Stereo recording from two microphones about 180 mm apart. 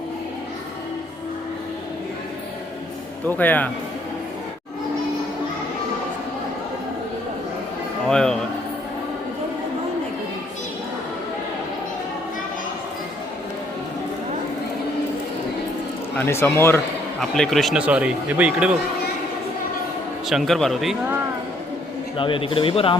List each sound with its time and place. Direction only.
3.2 s speech: 10° left (ahead or behind)
8.0 s speech: 5° left (ahead or behind)
16.1 s speech: 15° left (ahead or behind)
17.2 s speech: 5° left (ahead or behind)
20.3 s speech: centre (ahead or behind)
22.2 s a man's voice: 30° left (ahead or behind)